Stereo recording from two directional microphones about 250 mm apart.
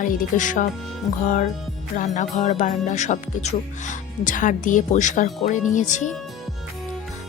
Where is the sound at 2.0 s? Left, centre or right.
Left.